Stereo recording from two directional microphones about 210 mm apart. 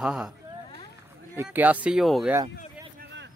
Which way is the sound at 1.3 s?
10° right (ahead or behind).